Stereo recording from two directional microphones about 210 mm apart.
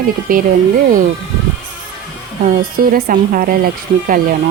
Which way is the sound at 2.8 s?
45° right (ahead or behind).